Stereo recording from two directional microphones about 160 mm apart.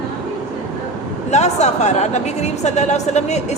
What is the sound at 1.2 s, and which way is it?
Speech, 45° left (ahead or behind).